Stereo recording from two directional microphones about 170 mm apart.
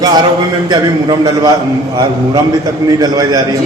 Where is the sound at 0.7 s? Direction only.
25° right (ahead or behind).